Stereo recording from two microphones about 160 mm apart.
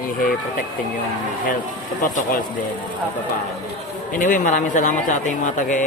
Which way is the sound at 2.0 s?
60° left (ahead or behind).